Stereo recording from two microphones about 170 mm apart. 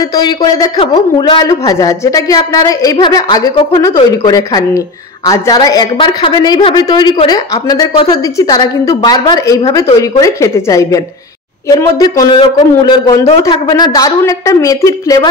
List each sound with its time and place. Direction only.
0.1 s a woman's voice: 25° left (ahead or behind)